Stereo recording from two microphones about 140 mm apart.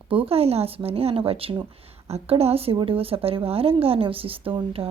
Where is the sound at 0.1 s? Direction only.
40° right (ahead or behind).